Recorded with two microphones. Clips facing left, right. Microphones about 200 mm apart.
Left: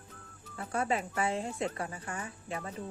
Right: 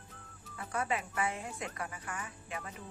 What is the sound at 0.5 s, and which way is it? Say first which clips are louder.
Speech: left 3 dB; 30° left (ahead or behind).